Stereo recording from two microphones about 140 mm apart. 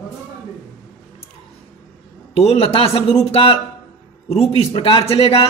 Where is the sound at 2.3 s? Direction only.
45° left (ahead or behind).